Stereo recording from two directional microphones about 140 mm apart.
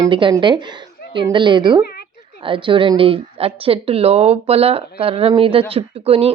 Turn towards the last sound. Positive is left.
turn(degrees=-45)  # may be behind; listen again after turning